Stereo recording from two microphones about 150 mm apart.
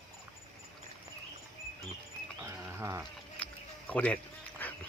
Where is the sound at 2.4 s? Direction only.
20° right (ahead or behind).